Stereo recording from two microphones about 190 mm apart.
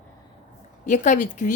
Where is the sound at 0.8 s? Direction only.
40° left (ahead or behind).